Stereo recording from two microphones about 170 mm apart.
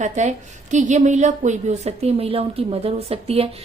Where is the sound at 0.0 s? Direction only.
45° right (ahead or behind).